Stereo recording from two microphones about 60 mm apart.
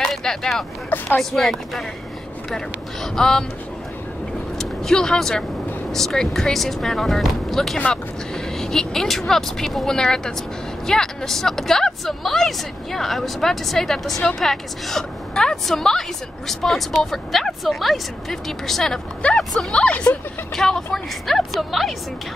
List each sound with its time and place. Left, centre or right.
0.0 s a sound: centre
0.8 s speech: left
1.3 s a woman's voice: centre
4.6 s a woman's voice: centre
20.5 s speech: centre